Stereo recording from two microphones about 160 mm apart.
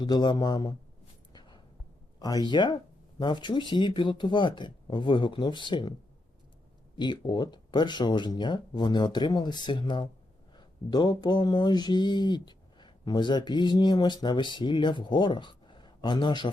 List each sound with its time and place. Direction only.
0.0 s speech: 25° left (ahead or behind)
1.3 s a sound: 25° left (ahead or behind)
2.1 s speech: 25° left (ahead or behind)
6.9 s speech: 30° left (ahead or behind)